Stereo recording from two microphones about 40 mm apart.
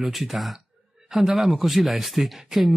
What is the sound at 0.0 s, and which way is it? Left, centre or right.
Speech, centre.